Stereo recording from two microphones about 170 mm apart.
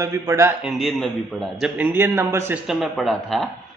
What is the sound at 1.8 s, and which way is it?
Speech, 10° right (ahead or behind).